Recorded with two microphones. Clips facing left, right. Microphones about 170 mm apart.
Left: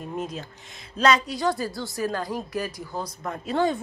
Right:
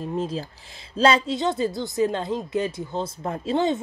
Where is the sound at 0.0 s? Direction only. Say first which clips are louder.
Right 5 dB; 30° right (ahead or behind).